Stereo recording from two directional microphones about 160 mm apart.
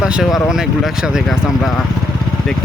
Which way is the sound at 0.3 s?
20° left (ahead or behind).